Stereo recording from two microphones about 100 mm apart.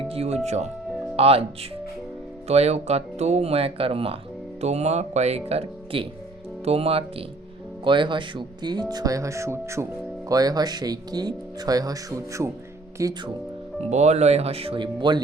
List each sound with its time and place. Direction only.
0.1 s speech: 90° right
1.1 s speech: 80° right
2.5 s speech: 90° right; by 4.2 s 70° right (ahead or behind)
4.6 s speech: 90° right
7.9 s speech: 55° right (ahead or behind); by 9.8 s 30° right (ahead or behind)
10.2 s speech: 40° right (ahead or behind)
13.8 s speech: 90° right; by 15.2 s 50° right (ahead or behind)